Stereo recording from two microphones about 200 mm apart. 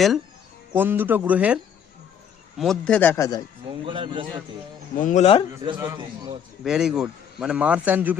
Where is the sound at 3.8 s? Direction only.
25° right (ahead or behind).